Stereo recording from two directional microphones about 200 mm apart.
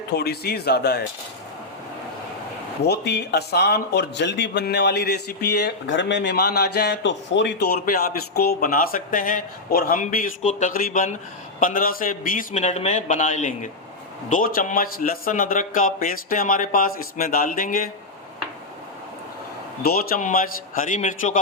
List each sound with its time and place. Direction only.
0.2 s speech: 50° left (ahead or behind)
2.8 s a man's voice: 55° left (ahead or behind)
19.8 s a man's voice: 50° left (ahead or behind)